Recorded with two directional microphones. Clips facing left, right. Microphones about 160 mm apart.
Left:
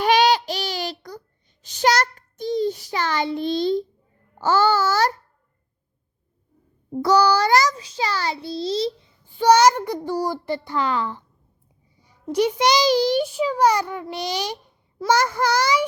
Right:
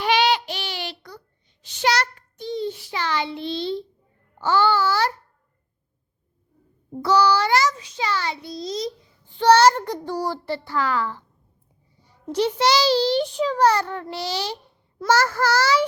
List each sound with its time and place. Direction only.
0.0 s child singing: 40° left (ahead or behind)
4.4 s a child's voice: 40° left (ahead or behind)
7.0 s a child's voice: 40° left (ahead or behind)
9.4 s a child's voice: 10° left (ahead or behind)
11.9 s a sound: 15° left (ahead or behind)
12.3 s a child's voice: 10° left (ahead or behind)